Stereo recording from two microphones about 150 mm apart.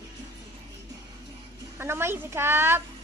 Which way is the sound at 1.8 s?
15° right (ahead or behind).